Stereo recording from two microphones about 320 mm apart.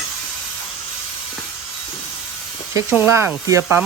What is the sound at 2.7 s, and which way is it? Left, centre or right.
Speech, centre.